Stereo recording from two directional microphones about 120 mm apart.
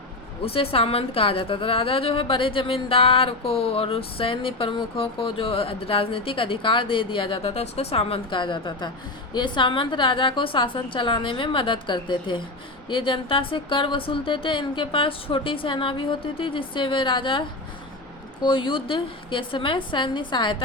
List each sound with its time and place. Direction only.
0.4 s a woman's voice: 50° left (ahead or behind)
18.4 s a woman's voice: 45° left (ahead or behind)